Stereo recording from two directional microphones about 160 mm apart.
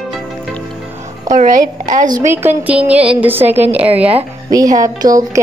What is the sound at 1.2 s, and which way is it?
A woman's voice, 55° right (ahead or behind).